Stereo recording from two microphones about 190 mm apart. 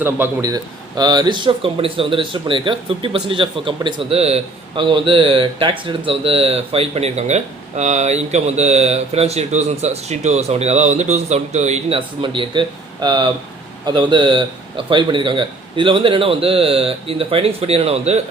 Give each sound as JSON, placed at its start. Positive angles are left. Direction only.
{"t": 0.0, "sound": "speech", "side_deg": -15}